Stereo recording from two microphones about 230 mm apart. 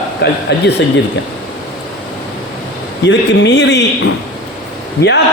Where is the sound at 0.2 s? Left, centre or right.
Left.